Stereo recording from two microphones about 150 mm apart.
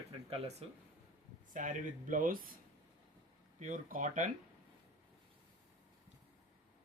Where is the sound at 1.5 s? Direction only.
60° right (ahead or behind).